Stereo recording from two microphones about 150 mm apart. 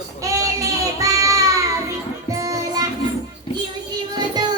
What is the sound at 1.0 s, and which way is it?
Child singing, 20° right (ahead or behind).